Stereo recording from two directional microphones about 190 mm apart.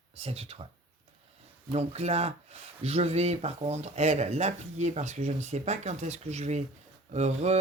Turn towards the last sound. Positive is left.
turn(degrees=-35)  # may be behind; listen again after turning